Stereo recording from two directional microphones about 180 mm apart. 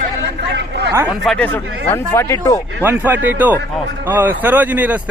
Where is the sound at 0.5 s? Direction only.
75° right (ahead or behind).